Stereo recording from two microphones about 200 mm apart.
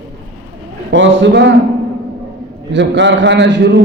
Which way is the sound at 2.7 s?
60° right (ahead or behind).